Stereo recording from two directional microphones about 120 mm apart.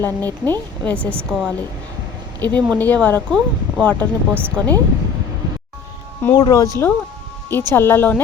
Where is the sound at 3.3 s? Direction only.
Centre (ahead or behind).